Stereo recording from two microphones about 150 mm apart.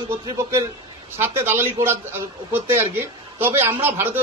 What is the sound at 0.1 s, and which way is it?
A man's voice, 15° right (ahead or behind).